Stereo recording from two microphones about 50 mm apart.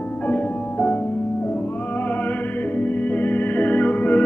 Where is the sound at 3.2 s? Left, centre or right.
Left.